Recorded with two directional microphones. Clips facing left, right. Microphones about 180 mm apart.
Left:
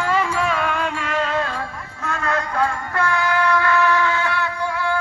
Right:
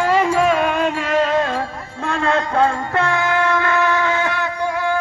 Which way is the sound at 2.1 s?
25° right (ahead or behind).